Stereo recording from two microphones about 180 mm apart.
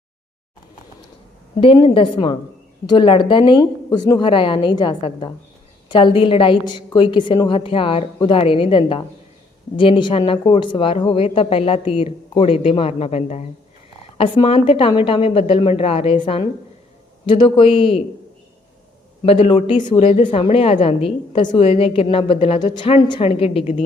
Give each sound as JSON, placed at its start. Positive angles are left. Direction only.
{"t": 1.6, "sound": "a woman's voice", "side_deg": 30}
{"t": 19.2, "sound": "speech", "side_deg": 35}